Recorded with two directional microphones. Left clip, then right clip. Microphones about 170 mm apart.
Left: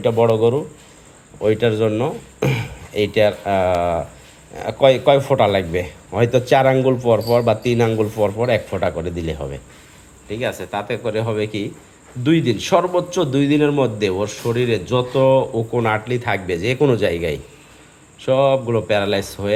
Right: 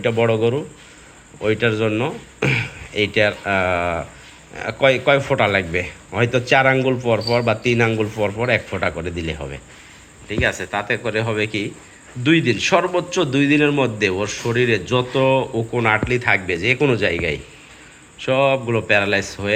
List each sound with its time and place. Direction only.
0.0 s a man's voice: 15° left (ahead or behind)